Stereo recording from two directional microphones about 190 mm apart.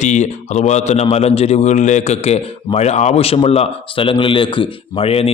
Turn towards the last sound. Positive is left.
turn(degrees=30)  # may be behind; listen again after turning